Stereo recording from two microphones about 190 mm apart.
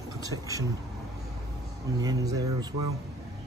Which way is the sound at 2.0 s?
20° right (ahead or behind).